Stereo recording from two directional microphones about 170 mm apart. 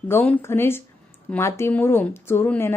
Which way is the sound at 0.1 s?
15° left (ahead or behind).